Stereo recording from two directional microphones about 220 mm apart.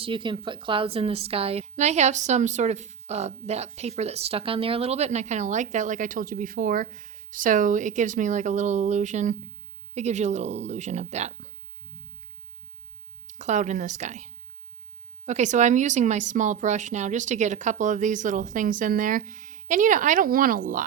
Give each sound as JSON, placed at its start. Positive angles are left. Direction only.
{"t": 0.0, "sound": "a woman's voice", "side_deg": -20}
{"t": 13.2, "sound": "a woman's voice", "side_deg": -35}
{"t": 15.3, "sound": "a woman's voice", "side_deg": -30}